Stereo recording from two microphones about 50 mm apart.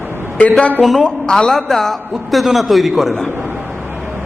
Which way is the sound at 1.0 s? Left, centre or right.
Centre.